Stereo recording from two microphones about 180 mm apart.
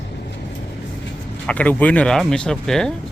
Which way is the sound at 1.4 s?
10° left (ahead or behind).